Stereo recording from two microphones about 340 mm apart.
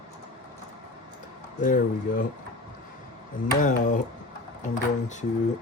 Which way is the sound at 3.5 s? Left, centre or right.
Left.